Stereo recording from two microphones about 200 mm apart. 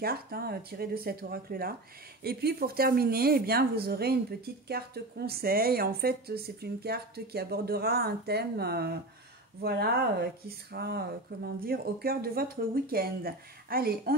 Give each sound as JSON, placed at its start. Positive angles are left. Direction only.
{"t": 0.0, "sound": "speech", "side_deg": -50}